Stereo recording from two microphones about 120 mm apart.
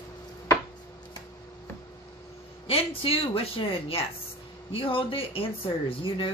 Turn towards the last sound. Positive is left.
turn(degrees=45)  # may be behind; listen again after turning